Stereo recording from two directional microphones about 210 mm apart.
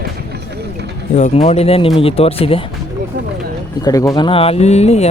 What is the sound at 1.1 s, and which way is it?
Speech, 30° left (ahead or behind).